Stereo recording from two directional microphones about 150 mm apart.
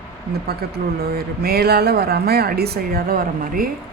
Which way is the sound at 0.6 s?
90° right.